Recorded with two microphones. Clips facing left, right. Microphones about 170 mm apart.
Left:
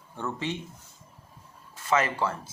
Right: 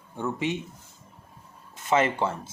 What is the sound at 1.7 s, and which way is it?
Speech, 25° right (ahead or behind).